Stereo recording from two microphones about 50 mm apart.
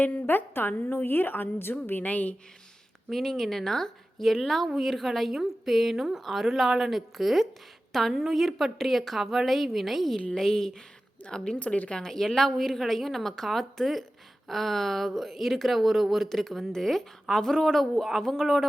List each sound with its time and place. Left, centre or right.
0.0 s a woman's voice: left
3.1 s a woman's voice: centre; by 11.9 s left
11.9 s speech: centre